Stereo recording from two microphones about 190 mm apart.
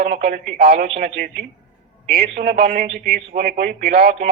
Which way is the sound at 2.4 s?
55° right (ahead or behind).